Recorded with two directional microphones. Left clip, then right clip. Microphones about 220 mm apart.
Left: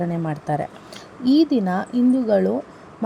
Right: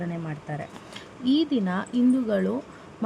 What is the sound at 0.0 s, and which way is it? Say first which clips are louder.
Speech: left 9 dB; 20° left (ahead or behind).